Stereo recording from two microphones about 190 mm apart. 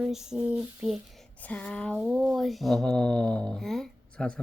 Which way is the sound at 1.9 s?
10° right (ahead or behind).